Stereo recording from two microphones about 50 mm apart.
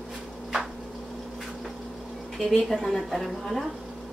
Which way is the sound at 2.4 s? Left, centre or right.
Centre.